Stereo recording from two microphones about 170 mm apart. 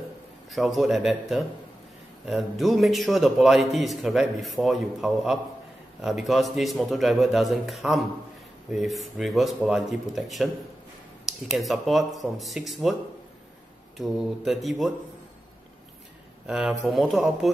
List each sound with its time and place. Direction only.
0.5 s a man's voice: centre (ahead or behind)
13.9 s a man's voice: centre (ahead or behind)
16.4 s a man's voice: centre (ahead or behind)